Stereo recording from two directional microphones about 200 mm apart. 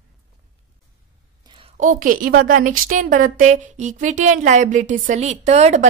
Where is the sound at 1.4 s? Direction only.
25° right (ahead or behind).